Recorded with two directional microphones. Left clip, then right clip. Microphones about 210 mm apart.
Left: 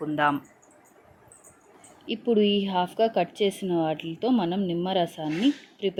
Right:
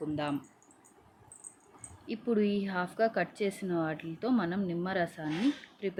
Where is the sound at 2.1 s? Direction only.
20° left (ahead or behind).